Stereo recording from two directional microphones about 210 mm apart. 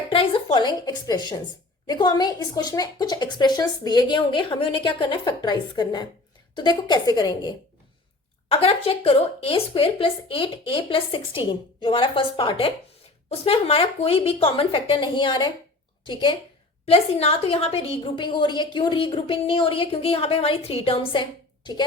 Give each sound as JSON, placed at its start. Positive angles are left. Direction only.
{"t": 0.1, "sound": "a woman's voice", "side_deg": 25}